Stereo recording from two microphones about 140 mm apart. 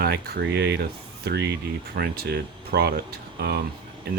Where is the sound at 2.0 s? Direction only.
90° right.